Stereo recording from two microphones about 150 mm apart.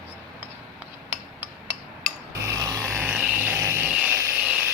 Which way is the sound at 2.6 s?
25° right (ahead or behind).